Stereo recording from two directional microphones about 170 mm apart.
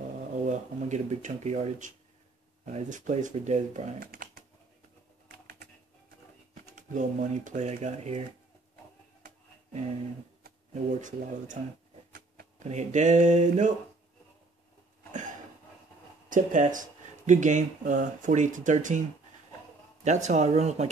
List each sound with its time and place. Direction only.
0.5 s speech: 45° right (ahead or behind)
4.0 s speech: 60° right (ahead or behind)
5.3 s typing: 60° right (ahead or behind)
6.5 s speech: 45° right (ahead or behind)
10.7 s speech: 50° right (ahead or behind)
12.1 s a sound: 55° right (ahead or behind)
12.6 s speech: 45° right (ahead or behind)
16.3 s speech: 50° right (ahead or behind)